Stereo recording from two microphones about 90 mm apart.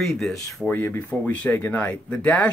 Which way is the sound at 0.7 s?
20° left (ahead or behind).